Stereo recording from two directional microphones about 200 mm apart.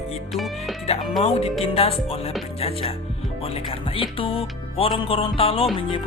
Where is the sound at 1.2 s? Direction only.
30° left (ahead or behind).